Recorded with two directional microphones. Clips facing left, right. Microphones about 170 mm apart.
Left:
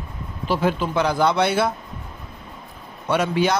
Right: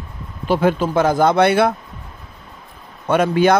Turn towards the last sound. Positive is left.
turn(degrees=-55)  # may be behind; listen again after turning